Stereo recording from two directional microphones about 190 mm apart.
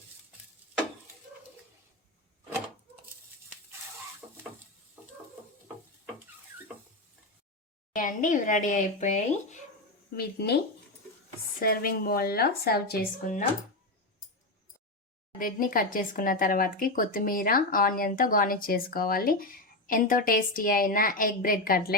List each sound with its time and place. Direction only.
7.9 s speech: 40° left (ahead or behind)
10.2 s speech: 60° left (ahead or behind)
11.6 s speech: 50° left (ahead or behind)
15.4 s speech: 50° left (ahead or behind)